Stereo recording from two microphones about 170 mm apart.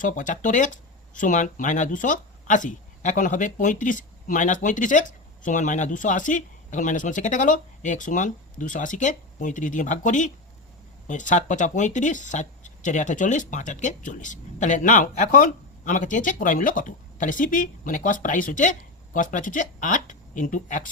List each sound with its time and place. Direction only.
0.0 s speech: 50° left (ahead or behind)